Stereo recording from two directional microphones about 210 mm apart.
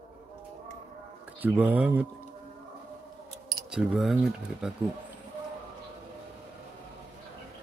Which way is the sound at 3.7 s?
Centre (ahead or behind).